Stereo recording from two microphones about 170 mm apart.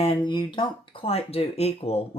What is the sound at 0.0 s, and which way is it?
Speech, 30° left (ahead or behind).